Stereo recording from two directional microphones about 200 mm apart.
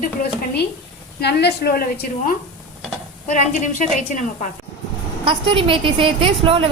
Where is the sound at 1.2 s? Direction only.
55° left (ahead or behind).